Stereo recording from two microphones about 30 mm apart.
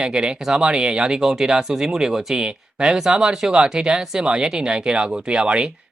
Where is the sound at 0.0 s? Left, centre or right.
Right.